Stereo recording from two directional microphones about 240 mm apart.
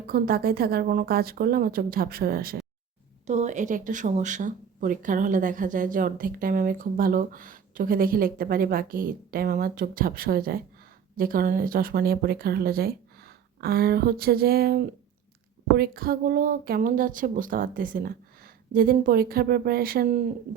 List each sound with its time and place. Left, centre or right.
0.1 s speech: right